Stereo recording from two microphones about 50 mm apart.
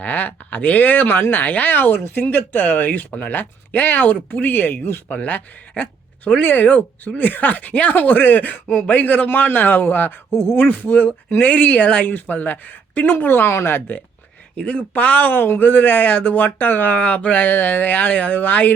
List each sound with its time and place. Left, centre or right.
0.0 s speech: left
3.1 s speech: left
3.3 s speech: left
10.7 s speech: left
12.0 s speech: left
13.5 s speech: left
14.5 s speech: left